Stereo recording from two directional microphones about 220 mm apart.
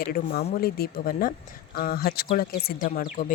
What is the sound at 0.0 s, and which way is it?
Speech, 45° left (ahead or behind).